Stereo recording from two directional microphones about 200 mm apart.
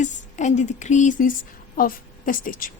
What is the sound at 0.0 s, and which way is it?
A woman's voice, 35° left (ahead or behind).